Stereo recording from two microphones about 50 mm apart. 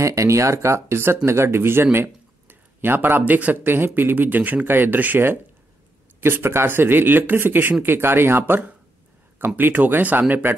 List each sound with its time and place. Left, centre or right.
0.0 s speech: right
3.6 s speech: right
4.6 s speech: right